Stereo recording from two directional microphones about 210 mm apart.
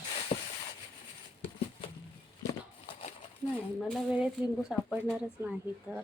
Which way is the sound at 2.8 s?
35° left (ahead or behind).